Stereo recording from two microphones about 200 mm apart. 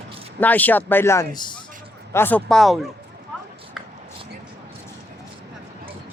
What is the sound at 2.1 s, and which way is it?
Speech, 10° left (ahead or behind).